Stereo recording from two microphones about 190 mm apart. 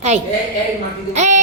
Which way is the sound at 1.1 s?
40° right (ahead or behind).